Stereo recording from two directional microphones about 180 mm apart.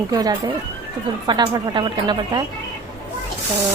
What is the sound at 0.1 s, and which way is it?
A woman's voice, 20° right (ahead or behind).